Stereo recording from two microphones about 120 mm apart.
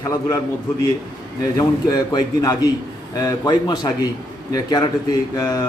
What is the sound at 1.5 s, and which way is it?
Speech, 35° left (ahead or behind).